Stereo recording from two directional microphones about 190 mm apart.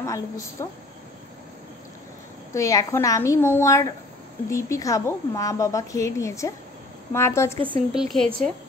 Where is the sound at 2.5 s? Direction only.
15° left (ahead or behind).